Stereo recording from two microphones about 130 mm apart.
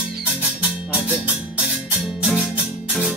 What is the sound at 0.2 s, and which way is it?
Music, 10° right (ahead or behind).